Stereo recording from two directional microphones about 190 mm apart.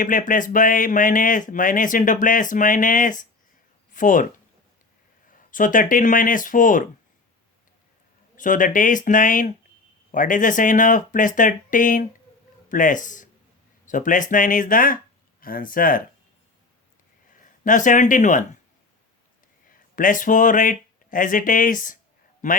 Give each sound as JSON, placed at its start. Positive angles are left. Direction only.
{"t": 0.0, "sound": "speech", "side_deg": 45}
{"t": 5.5, "sound": "speech", "side_deg": 45}
{"t": 8.4, "sound": "speech", "side_deg": 45}
{"t": 17.4, "sound": "speech", "side_deg": 45}
{"t": 20.0, "sound": "speech", "side_deg": 45}